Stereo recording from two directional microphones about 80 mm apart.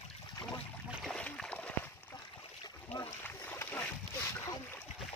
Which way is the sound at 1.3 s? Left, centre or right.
Centre.